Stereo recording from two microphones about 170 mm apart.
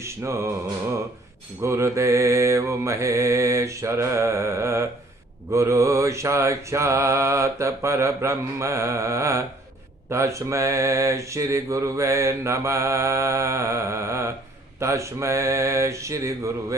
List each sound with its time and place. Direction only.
0.0 s mantra: 15° right (ahead or behind)
1.6 s mantra: 15° right (ahead or behind)